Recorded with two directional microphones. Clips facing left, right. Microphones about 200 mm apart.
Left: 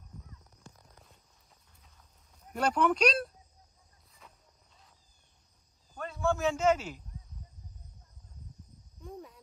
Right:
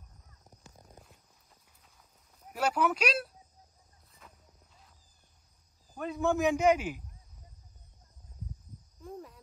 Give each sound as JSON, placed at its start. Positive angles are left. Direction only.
{"t": 2.4, "sound": "a man's voice", "side_deg": -5}
{"t": 4.2, "sound": "walk", "side_deg": 0}
{"t": 5.9, "sound": "a man's voice", "side_deg": -15}
{"t": 9.0, "sound": "a sound", "side_deg": 0}